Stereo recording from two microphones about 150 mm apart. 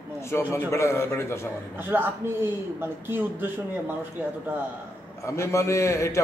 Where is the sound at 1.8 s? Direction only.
15° right (ahead or behind).